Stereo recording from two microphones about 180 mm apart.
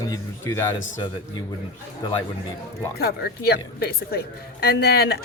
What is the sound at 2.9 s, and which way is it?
Speech, 60° left (ahead or behind).